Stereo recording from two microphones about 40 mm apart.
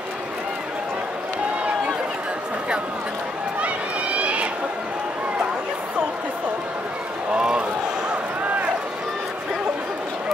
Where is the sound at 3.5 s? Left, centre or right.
Right.